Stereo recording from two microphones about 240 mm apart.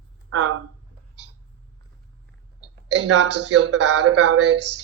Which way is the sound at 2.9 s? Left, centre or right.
Right.